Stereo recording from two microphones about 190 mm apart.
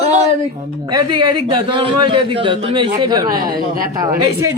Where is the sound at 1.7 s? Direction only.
25° right (ahead or behind).